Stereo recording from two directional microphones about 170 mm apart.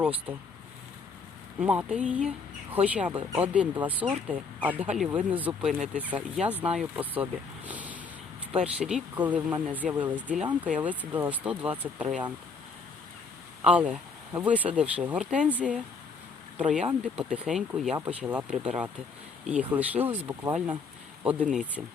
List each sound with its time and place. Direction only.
0.0 s speech: 10° right (ahead or behind)
1.5 s speech: 10° right (ahead or behind)
13.7 s speech: 5° right (ahead or behind)